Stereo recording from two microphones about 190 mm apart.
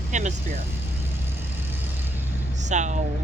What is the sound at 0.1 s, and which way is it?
Speech, 40° right (ahead or behind).